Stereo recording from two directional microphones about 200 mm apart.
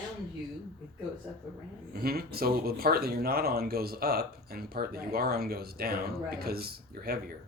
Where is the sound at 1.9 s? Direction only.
50° right (ahead or behind).